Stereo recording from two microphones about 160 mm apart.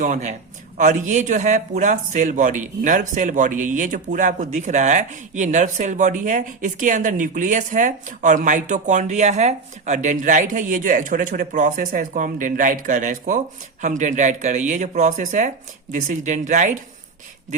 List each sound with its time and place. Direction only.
0.0 s a man's voice: 50° right (ahead or behind)